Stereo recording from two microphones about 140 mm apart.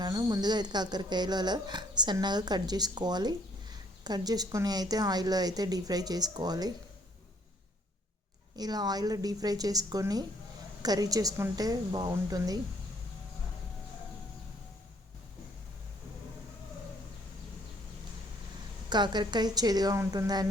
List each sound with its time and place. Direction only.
0.0 s speech: 25° right (ahead or behind)
8.5 s speech: 30° right (ahead or behind)
18.9 s speech: 30° right (ahead or behind)